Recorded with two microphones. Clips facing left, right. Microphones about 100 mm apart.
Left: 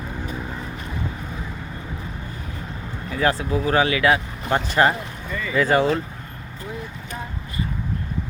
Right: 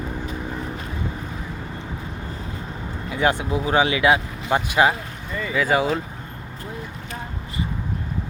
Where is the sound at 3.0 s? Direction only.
20° right (ahead or behind).